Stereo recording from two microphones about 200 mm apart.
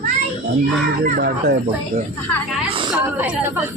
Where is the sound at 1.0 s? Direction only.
50° right (ahead or behind).